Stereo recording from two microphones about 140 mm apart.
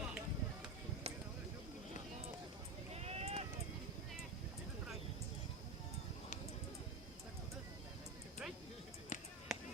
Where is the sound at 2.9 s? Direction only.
50° right (ahead or behind).